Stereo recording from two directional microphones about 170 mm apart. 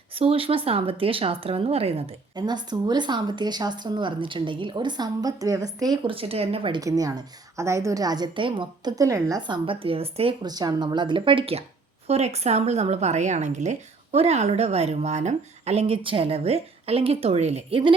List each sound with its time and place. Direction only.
0.2 s a woman's voice: 35° right (ahead or behind)
9.6 s a woman's voice: 30° right (ahead or behind)